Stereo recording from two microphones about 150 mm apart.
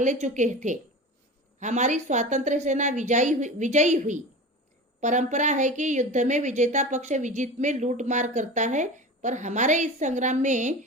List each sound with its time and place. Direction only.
0.0 s a woman's voice: 55° right (ahead or behind)